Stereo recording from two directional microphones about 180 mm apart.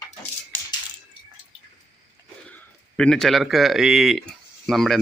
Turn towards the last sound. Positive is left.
turn(degrees=0)  # may be behind; listen again after turning